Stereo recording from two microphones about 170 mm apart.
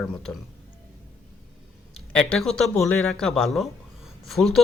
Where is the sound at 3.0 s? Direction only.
5° left (ahead or behind).